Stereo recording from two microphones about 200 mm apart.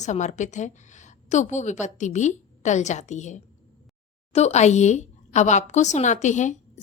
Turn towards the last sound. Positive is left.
turn(degrees=35)  # may be behind; listen again after turning